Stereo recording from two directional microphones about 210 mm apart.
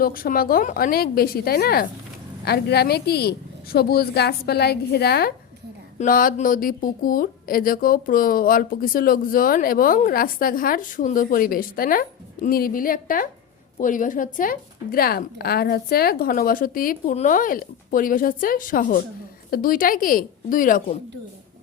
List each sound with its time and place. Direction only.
0.0 s a woman's voice: 45° left (ahead or behind)